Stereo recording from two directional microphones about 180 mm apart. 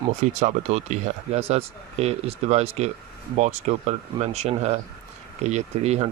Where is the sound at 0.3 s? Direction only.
40° right (ahead or behind).